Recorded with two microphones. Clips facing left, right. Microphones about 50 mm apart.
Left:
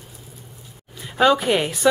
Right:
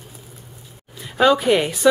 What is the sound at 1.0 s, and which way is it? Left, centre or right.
Speech, centre.